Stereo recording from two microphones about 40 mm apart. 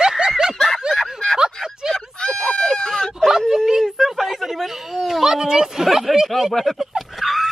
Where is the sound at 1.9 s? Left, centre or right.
Centre.